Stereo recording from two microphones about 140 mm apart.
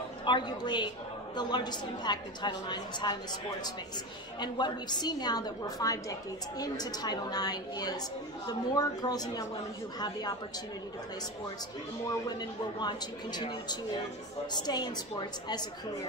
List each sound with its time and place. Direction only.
0.2 s a woman's voice: 30° left (ahead or behind)
12.3 s a woman's voice: 30° left (ahead or behind)